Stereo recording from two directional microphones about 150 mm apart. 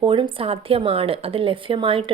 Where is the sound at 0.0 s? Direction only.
35° right (ahead or behind).